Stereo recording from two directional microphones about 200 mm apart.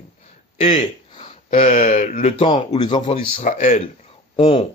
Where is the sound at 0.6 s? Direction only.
30° left (ahead or behind).